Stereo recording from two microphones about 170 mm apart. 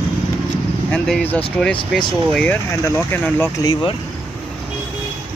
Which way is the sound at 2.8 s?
10° left (ahead or behind).